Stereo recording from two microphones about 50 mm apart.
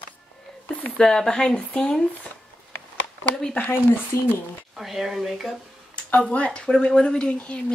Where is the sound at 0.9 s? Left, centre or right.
Centre.